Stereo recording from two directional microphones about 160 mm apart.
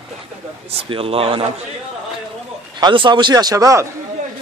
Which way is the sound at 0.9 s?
35° right (ahead or behind).